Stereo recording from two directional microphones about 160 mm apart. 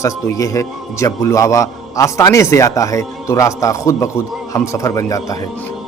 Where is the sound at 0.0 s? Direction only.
20° left (ahead or behind).